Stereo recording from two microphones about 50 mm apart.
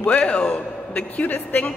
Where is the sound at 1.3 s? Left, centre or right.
Left.